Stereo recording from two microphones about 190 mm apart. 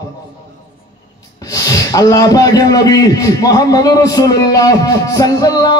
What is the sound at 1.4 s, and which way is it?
A man's voice, 20° left (ahead or behind).